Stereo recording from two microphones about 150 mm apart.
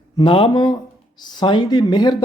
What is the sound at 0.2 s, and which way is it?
Speech, 35° left (ahead or behind).